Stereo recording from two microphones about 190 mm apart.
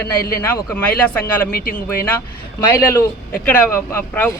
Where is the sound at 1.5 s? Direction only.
50° left (ahead or behind).